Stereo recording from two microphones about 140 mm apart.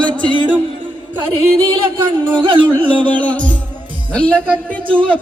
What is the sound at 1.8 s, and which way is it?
Speech, 35° right (ahead or behind).